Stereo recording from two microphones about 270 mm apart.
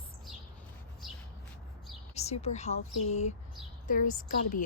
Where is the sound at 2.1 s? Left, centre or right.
Left.